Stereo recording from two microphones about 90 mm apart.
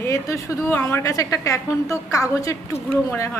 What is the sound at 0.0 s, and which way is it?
Speech, 35° left (ahead or behind).